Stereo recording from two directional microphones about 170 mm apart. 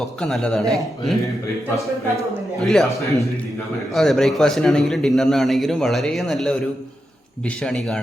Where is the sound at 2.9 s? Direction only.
20° left (ahead or behind).